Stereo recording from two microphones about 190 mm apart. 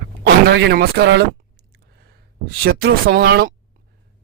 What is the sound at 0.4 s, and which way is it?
Speech, 60° right (ahead or behind).